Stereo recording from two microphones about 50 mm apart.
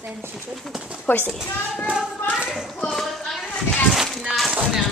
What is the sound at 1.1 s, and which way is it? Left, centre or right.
Speech, left.